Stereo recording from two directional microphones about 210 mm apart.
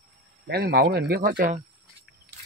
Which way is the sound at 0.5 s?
50° right (ahead or behind).